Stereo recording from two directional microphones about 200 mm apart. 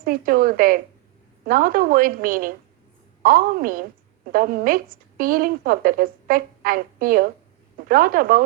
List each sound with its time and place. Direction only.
0.0 s a woman's voice: 45° right (ahead or behind)